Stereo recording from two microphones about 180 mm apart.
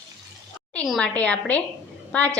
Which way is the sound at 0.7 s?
5° left (ahead or behind).